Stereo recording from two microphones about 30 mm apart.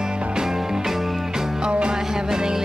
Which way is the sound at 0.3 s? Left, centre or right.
Right.